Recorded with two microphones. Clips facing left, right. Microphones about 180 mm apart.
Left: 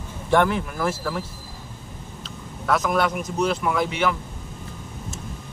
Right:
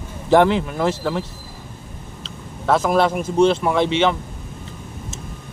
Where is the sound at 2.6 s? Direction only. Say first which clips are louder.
Right 5 dB; 25° right (ahead or behind).